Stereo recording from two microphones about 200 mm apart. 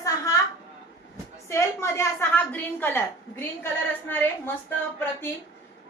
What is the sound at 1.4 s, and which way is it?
A woman's voice, 15° left (ahead or behind).